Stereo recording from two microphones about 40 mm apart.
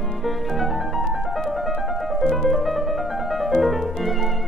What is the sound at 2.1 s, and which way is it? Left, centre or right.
Music, centre.